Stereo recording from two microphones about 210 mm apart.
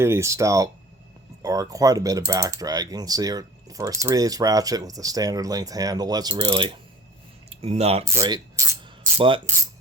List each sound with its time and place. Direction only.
0.0 s speech: 15° right (ahead or behind); by 8.0 s 30° right (ahead or behind)
8.0 s keys jangling: 15° right (ahead or behind)
9.1 s coin: 25° right (ahead or behind)